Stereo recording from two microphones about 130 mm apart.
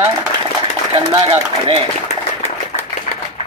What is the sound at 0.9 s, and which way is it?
Speech, 45° right (ahead or behind).